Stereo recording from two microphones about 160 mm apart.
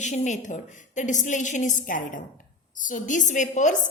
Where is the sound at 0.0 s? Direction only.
50° left (ahead or behind).